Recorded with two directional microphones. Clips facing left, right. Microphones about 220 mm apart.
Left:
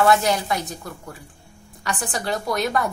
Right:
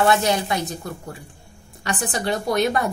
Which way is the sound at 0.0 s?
25° right (ahead or behind).